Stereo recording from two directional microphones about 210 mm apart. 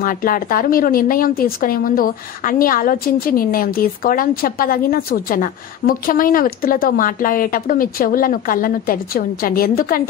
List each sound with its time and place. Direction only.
0.0 s speech: 40° left (ahead or behind)